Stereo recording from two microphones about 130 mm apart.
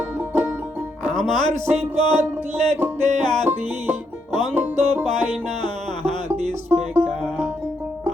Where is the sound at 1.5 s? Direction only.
55° right (ahead or behind).